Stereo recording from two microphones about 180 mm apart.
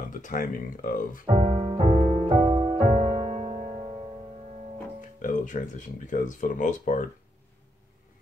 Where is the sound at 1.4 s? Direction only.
25° right (ahead or behind).